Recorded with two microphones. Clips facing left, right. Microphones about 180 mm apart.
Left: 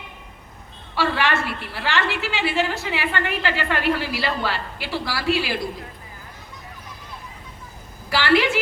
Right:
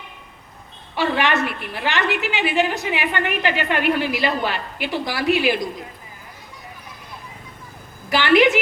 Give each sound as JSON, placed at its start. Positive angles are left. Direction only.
{"t": 0.9, "sound": "a woman's voice", "side_deg": -20}
{"t": 8.1, "sound": "a woman's voice", "side_deg": -20}